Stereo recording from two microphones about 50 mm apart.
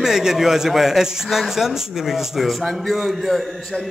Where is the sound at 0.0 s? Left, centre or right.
Centre.